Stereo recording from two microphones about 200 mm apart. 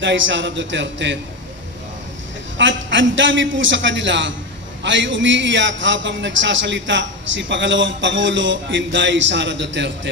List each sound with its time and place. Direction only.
0.0 s a man's voice: 65° right (ahead or behind)
2.5 s a man's voice: 65° right (ahead or behind)